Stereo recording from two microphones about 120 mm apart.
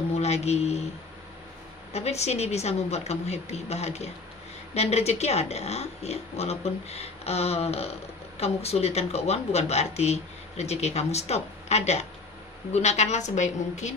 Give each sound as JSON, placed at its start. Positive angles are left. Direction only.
{"t": 0.2, "sound": "speech", "side_deg": 60}
{"t": 1.9, "sound": "a woman's voice", "side_deg": 60}